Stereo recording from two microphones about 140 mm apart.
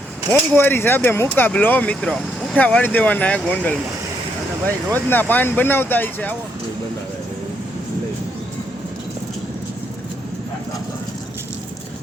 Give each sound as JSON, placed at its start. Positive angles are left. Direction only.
{"t": 0.3, "sound": "speech", "side_deg": 15}
{"t": 4.9, "sound": "speech", "side_deg": 15}